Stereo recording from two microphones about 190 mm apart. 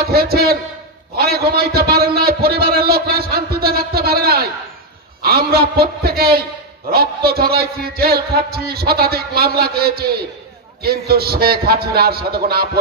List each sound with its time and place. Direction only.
0.0 s a man's voice: 55° right (ahead or behind)